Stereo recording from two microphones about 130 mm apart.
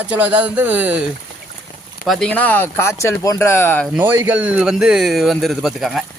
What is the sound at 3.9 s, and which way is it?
A man's voice, 15° right (ahead or behind).